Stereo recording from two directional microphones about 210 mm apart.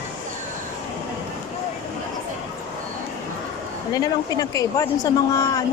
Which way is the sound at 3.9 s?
20° left (ahead or behind).